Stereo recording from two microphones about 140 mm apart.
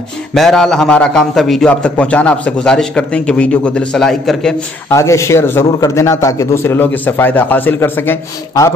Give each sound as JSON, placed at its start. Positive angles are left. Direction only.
{"t": 0.3, "sound": "a man's voice", "side_deg": 5}
{"t": 4.8, "sound": "a man's voice", "side_deg": 20}